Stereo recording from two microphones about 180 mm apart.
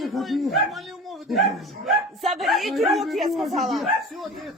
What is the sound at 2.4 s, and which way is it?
Speech, centre (ahead or behind).